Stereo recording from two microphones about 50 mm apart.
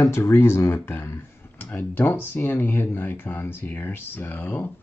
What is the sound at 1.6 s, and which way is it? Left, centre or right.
Speech, left.